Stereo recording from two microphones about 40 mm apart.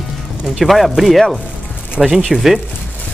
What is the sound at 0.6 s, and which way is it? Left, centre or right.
Speech, centre.